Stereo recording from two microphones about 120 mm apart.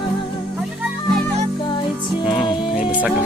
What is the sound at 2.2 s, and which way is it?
Music, centre (ahead or behind).